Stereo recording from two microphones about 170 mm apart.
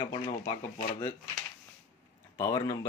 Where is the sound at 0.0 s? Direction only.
20° left (ahead or behind).